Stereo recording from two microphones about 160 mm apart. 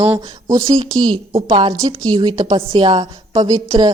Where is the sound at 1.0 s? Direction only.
30° right (ahead or behind).